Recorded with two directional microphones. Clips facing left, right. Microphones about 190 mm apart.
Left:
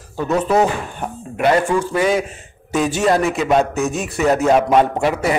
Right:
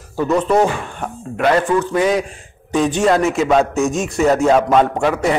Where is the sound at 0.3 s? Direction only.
5° left (ahead or behind).